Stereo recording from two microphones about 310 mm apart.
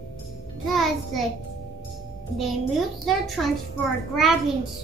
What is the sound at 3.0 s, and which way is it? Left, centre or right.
Speech, centre.